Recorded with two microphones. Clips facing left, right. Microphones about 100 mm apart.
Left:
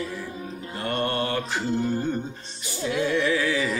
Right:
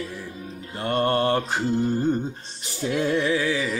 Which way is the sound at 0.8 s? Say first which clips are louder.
Right 5 dB; 35° right (ahead or behind).